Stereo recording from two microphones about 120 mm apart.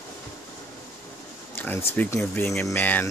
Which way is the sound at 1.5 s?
15° left (ahead or behind).